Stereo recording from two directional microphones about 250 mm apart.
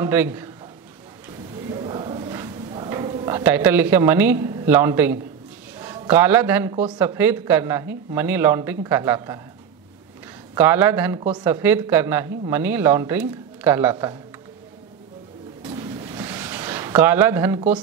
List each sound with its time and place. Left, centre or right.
0.0 s speech: centre
1.7 s a sound: centre
5.8 s a man's voice: centre
10.5 s speech: centre
11.1 s speech: centre
11.4 s speech: centre
15.6 s a sound: centre